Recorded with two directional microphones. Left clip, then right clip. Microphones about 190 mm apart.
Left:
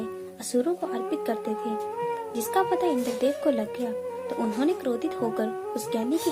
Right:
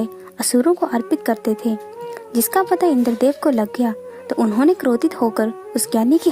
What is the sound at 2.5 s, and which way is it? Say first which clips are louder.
Speech: right 7 dB; 55° right (ahead or behind).